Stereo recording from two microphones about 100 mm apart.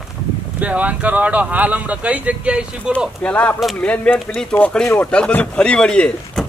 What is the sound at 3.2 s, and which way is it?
A man's voice, 15° left (ahead or behind).